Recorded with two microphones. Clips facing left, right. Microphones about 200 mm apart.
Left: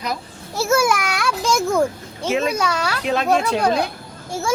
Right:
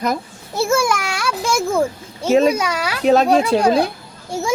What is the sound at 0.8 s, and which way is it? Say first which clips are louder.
Speech: even; centre (ahead or behind).